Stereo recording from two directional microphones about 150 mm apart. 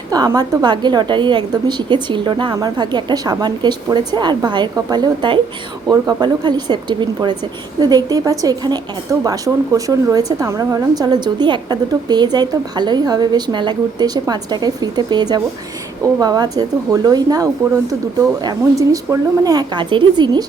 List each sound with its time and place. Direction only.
0.1 s a woman's voice: 25° right (ahead or behind)